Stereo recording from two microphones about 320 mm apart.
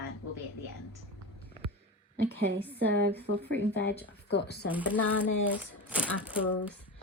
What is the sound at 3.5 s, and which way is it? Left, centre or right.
Speech, left.